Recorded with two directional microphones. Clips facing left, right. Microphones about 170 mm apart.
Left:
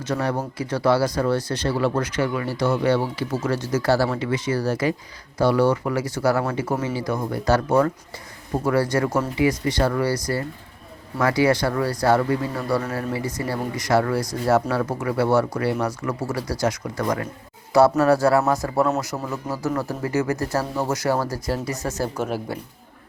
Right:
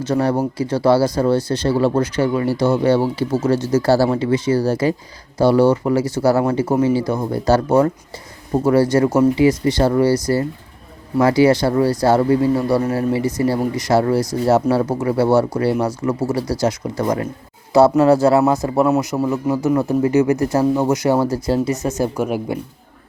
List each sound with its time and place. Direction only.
0.1 s speech: 30° right (ahead or behind)
11.2 s speech: 30° right (ahead or behind); by 22.5 s 15° right (ahead or behind)